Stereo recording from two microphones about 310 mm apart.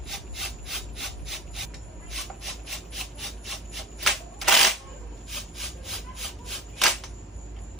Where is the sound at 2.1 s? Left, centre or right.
Centre.